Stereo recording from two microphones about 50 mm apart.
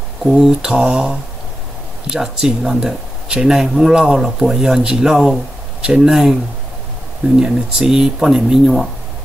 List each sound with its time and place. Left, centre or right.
0.2 s speech: centre
5.8 s speech: centre
7.3 s speech: centre